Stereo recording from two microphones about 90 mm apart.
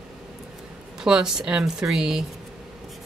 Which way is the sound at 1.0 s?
5° right (ahead or behind).